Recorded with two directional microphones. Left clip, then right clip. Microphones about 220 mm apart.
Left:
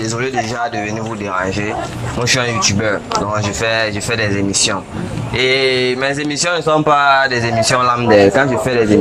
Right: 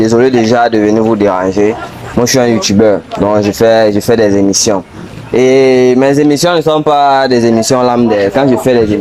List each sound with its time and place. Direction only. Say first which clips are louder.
0.0 s speech: right 11 dB; 40° right (ahead or behind)
1.5 s speech: right 8 dB; 30° right (ahead or behind)
6.7 s speech: right 1 dB; 20° right (ahead or behind)